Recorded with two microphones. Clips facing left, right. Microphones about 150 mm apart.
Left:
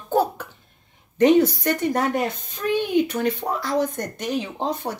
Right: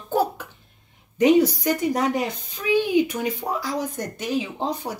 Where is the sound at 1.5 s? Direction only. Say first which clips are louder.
Even; 10° right (ahead or behind).